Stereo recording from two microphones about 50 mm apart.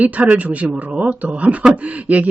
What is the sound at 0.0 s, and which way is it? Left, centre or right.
Speech, right.